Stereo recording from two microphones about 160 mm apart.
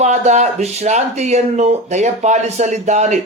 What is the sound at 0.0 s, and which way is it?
Speech, 45° right (ahead or behind).